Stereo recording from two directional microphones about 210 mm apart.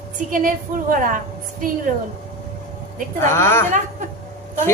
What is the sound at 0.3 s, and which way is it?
Speech, 40° right (ahead or behind).